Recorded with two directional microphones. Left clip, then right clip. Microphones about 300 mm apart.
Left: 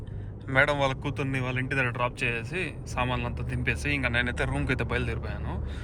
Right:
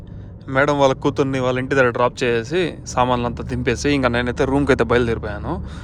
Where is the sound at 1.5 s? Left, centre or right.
Right.